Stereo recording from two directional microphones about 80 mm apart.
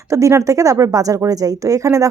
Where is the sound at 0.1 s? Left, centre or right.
Right.